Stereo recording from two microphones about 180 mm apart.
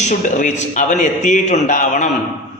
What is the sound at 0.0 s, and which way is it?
A man's voice, 40° left (ahead or behind).